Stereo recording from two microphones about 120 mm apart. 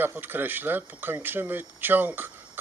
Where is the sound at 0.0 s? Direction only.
15° right (ahead or behind).